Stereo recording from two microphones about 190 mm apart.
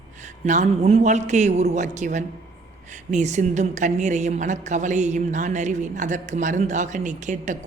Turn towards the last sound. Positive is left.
turn(degrees=-40)  # may be behind; listen again after turning